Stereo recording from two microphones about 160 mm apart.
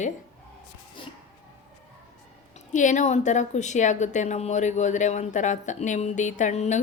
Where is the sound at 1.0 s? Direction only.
30° left (ahead or behind).